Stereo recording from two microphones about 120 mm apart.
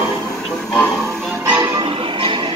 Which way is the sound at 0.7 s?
5° left (ahead or behind).